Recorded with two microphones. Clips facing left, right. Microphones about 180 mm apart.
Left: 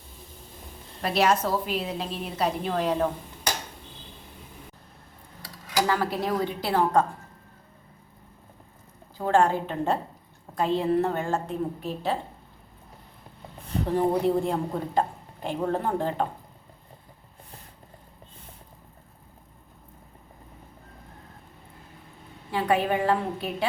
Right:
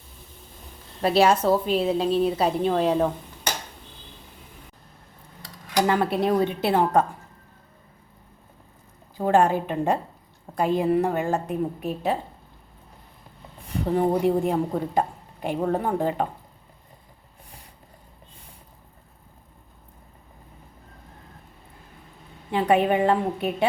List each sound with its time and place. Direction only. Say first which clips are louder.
1.0 s a woman's voice: right 5 dB; 30° right (ahead or behind)
5.9 s a woman's voice: right 4 dB; 25° right (ahead or behind)
9.1 s a woman's voice: right 2 dB; 15° right (ahead or behind)
13.9 s a woman's voice: right 2 dB; 15° right (ahead or behind)
22.5 s a woman's voice: right 4 dB; 20° right (ahead or behind)